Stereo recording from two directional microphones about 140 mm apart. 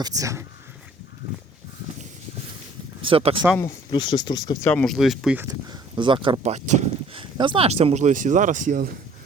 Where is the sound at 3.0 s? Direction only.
40° right (ahead or behind).